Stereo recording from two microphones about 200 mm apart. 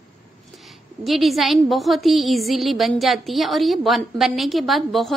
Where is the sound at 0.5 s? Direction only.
Centre (ahead or behind).